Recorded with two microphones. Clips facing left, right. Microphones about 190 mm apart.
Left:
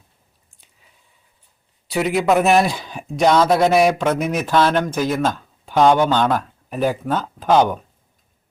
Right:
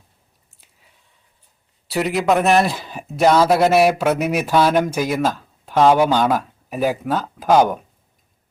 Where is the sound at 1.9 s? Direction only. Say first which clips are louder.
Left 1 dB; centre (ahead or behind).